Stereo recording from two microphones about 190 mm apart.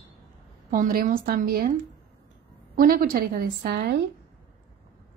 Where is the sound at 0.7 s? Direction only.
50° right (ahead or behind).